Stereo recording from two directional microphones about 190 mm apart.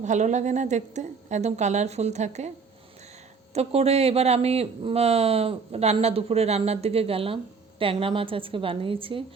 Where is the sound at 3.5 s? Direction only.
35° right (ahead or behind).